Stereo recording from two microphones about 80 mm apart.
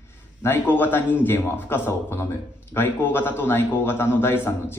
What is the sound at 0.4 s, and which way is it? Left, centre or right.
A man's voice, left.